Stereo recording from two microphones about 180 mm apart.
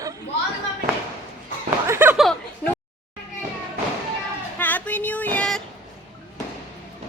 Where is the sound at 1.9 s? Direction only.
10° right (ahead or behind).